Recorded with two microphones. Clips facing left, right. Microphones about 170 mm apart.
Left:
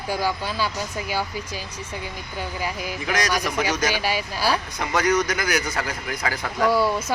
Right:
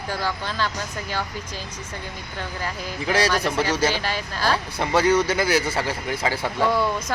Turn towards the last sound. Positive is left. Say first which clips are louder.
# left 2 dB
turn(degrees=5)  # may be behind; listen again after turning